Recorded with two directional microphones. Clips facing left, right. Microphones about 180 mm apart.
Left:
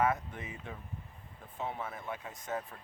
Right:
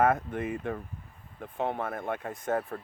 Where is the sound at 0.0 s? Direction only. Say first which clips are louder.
Right 6 dB; 55° right (ahead or behind).